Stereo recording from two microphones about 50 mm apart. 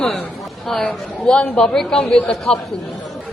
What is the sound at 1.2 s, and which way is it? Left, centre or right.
A man's voice, left.